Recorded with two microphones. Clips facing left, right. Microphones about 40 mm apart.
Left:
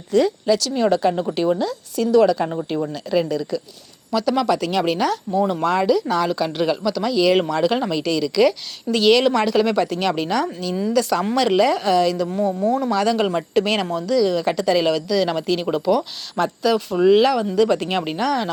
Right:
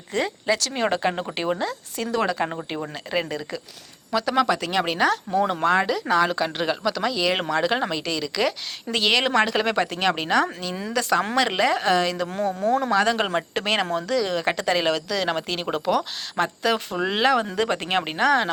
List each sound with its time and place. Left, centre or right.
0.1 s speech: right
5.3 s speech: right
5.6 s speech: right
12.3 s speech: right
12.9 s speech: right